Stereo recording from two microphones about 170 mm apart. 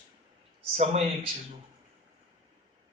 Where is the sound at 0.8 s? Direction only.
35° right (ahead or behind).